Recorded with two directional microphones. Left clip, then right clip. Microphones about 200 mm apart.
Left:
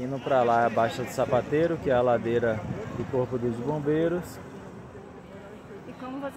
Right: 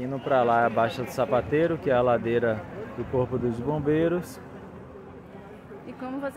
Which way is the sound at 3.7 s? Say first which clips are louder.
Right 2 dB; 10° right (ahead or behind).